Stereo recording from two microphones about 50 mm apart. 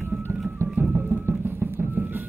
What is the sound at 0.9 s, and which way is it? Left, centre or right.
Music, right.